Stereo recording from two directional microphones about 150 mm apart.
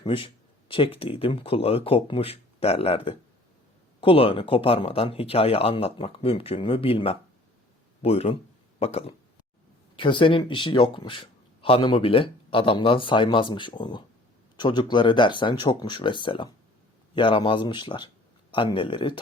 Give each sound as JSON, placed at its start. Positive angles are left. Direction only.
{"t": 0.0, "sound": "a man's voice", "side_deg": 35}